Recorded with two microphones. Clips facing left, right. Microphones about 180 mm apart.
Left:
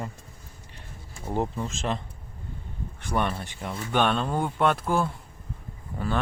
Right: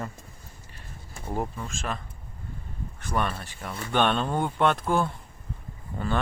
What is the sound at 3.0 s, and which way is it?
Speech, 15° left (ahead or behind).